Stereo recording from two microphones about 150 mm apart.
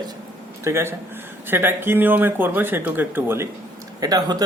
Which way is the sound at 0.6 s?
15° right (ahead or behind).